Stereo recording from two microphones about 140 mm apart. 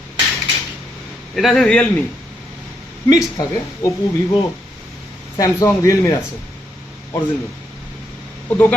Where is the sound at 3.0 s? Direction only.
25° left (ahead or behind).